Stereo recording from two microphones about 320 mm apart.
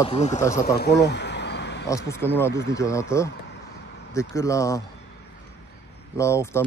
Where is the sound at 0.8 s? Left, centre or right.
Left.